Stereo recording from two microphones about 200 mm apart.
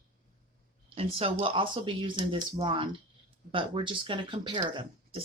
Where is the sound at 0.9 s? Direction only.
30° right (ahead or behind).